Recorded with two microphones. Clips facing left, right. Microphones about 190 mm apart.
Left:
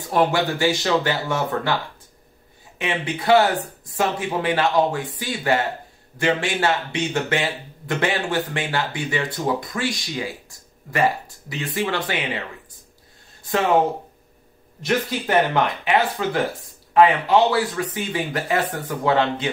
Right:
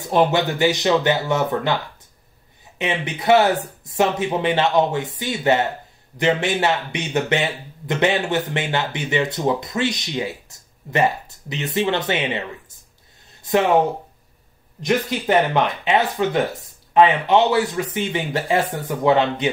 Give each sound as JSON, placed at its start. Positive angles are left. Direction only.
{"t": 0.1, "sound": "speech", "side_deg": -20}
{"t": 2.8, "sound": "speech", "side_deg": -20}
{"t": 14.9, "sound": "speech", "side_deg": -20}